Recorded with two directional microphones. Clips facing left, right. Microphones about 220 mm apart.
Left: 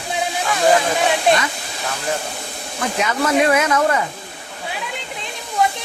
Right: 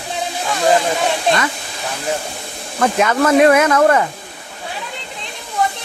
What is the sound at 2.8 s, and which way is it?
Speech, 55° right (ahead or behind).